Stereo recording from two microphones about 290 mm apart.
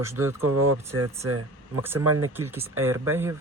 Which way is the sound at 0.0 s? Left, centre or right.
Centre.